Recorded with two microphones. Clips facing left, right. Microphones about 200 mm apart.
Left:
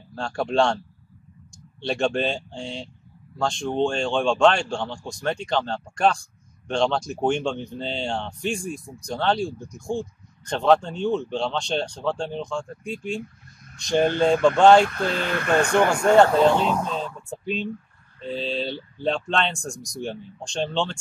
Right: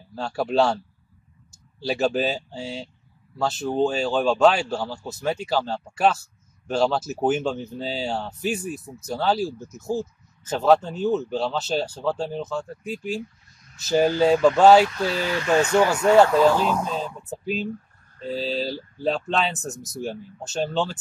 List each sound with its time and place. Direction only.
0.1 s speech: 5° right (ahead or behind)
1.8 s speech: 5° right (ahead or behind)
14.9 s speech: 55° left (ahead or behind)
16.4 s speech: 5° right (ahead or behind)